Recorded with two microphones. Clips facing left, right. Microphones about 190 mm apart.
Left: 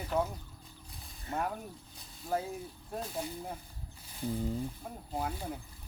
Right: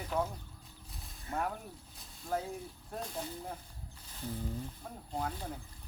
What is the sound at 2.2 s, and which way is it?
Speech, 5° left (ahead or behind).